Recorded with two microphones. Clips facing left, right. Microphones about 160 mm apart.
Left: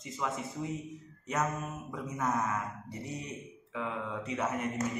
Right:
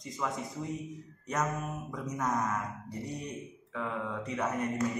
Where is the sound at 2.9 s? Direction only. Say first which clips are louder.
Right 2 dB; 35° right (ahead or behind).